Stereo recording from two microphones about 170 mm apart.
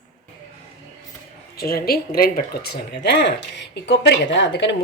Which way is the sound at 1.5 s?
60° left (ahead or behind).